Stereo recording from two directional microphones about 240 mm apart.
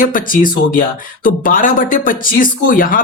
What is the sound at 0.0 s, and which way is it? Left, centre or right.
Speech, left.